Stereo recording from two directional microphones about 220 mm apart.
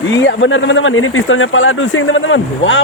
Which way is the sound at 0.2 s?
55° left (ahead or behind).